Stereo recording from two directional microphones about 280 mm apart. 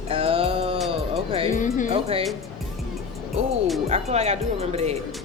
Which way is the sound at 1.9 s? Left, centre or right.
Right.